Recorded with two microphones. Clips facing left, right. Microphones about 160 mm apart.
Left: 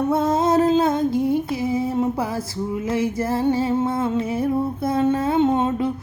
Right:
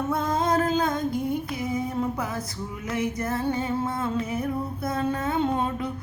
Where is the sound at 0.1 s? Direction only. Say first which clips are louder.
Left 4 dB; 25° left (ahead or behind).